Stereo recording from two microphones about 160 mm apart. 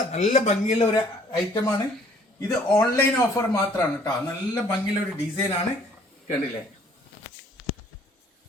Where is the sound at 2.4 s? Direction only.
20° left (ahead or behind).